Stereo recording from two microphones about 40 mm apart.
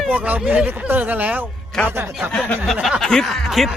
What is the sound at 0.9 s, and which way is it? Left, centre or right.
Speech, right.